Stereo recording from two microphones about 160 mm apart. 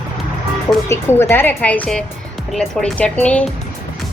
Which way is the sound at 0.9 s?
15° left (ahead or behind).